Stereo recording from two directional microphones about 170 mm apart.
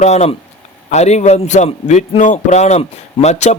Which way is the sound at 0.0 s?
40° left (ahead or behind).